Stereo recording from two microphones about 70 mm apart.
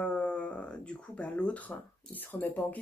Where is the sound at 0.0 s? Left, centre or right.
Centre.